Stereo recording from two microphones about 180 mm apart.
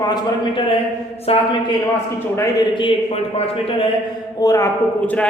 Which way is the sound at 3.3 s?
30° left (ahead or behind).